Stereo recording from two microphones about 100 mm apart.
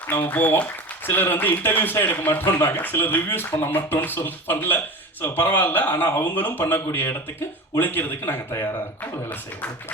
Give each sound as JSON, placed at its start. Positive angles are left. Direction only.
{"t": 0.1, "sound": "speech", "side_deg": 20}